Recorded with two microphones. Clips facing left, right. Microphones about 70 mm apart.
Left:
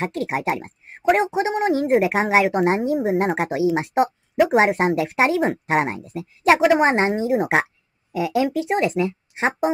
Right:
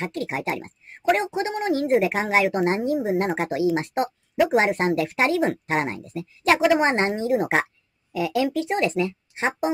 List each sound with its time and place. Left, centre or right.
0.5 s speech: centre
1.0 s speech: centre
4.7 s speech: centre
5.9 s speech: left
6.6 s a woman's voice: centre